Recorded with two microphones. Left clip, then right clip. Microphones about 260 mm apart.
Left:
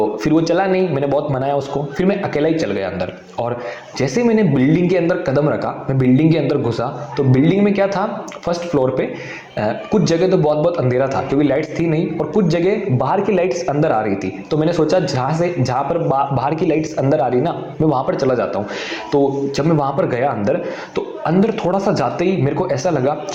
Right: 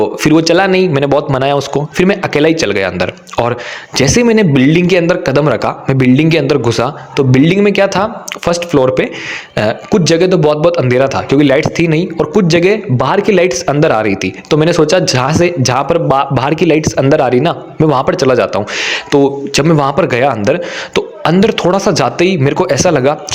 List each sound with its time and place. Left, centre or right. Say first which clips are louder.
0.2 s a man's voice: right 10 dB; right